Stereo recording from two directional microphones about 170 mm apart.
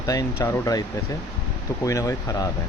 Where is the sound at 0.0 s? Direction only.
20° left (ahead or behind).